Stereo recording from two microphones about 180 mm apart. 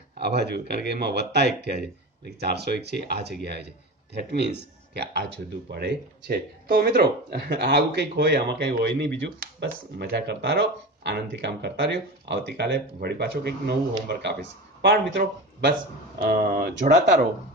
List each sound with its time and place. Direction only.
0.2 s speech: 65° right (ahead or behind)
5.7 s speech: 70° right (ahead or behind)
16.2 s speech: 55° right (ahead or behind)